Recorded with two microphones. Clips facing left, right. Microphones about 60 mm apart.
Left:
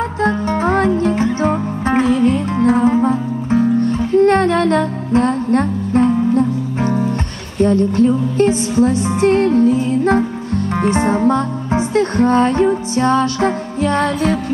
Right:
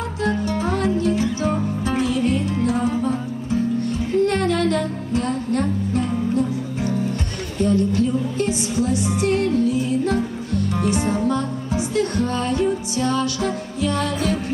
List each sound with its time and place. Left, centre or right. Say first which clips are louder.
0.2 s music: left 5 dB; left